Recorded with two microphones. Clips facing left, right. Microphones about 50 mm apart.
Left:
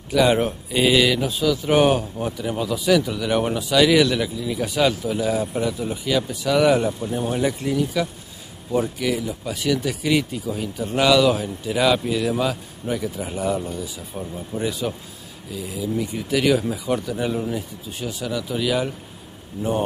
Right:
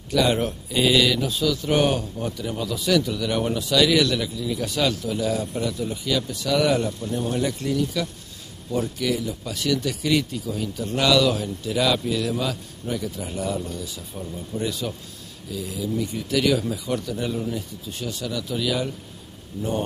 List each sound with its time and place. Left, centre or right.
0.1 s speech: centre